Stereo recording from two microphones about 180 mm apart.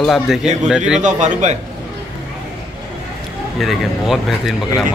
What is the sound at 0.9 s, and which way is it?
Speech, 45° right (ahead or behind).